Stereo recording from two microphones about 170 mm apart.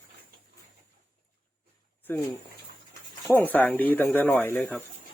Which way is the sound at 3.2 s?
10° left (ahead or behind).